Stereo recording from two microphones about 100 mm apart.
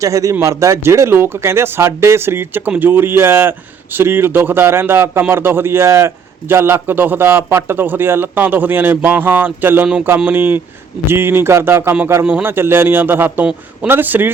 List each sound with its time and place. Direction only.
0.0 s a man's voice: 35° right (ahead or behind)
9.8 s a sound: 10° right (ahead or behind)
10.2 s a man's voice: 20° right (ahead or behind)